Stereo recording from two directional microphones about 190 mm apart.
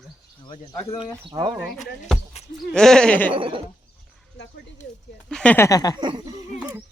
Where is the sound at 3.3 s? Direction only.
25° right (ahead or behind).